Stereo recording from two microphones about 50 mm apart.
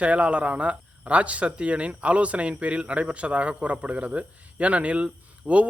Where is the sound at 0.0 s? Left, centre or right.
Right.